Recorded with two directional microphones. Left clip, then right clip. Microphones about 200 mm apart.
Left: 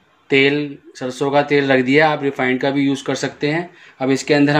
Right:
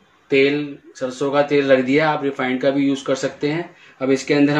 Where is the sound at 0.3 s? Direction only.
45° left (ahead or behind).